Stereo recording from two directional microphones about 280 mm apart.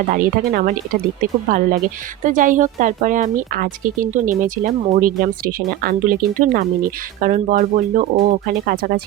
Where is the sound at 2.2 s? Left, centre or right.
Right.